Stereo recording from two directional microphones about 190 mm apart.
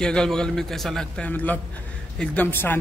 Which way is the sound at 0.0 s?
5° left (ahead or behind).